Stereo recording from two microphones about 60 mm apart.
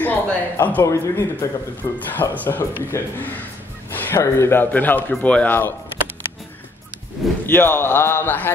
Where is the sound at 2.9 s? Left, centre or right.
Left.